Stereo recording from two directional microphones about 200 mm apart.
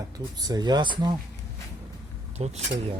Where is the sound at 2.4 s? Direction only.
35° right (ahead or behind).